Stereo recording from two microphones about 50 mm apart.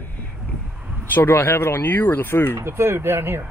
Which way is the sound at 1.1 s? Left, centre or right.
Left.